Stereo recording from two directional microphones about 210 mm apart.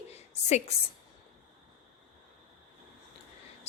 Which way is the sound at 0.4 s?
35° left (ahead or behind).